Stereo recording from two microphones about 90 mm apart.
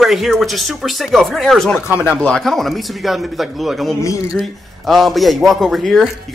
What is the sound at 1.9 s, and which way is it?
Speech, 10° right (ahead or behind).